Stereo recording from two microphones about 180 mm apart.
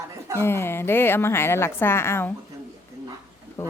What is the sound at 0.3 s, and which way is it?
A woman's voice, 15° left (ahead or behind).